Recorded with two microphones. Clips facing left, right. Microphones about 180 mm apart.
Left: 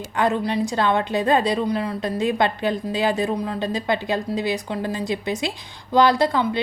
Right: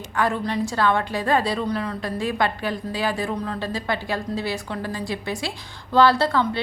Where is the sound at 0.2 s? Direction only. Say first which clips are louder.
Left 2 dB; 15° left (ahead or behind).